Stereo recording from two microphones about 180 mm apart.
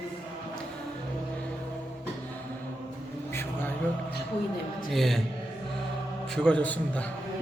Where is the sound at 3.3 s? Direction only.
10° left (ahead or behind).